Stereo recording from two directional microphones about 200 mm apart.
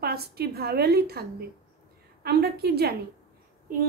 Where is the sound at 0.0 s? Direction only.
50° right (ahead or behind).